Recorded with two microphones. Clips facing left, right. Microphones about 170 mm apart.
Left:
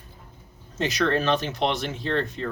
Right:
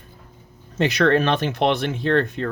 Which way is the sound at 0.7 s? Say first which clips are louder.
Right 6 dB; 60° right (ahead or behind).